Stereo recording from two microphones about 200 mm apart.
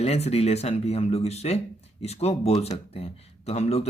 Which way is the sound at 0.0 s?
30° left (ahead or behind).